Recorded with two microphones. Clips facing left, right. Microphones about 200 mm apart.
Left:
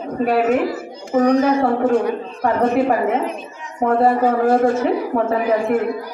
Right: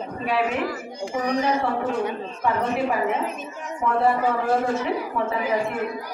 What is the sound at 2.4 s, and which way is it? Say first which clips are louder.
A woman's voice: left 7 dB; 45° left (ahead or behind).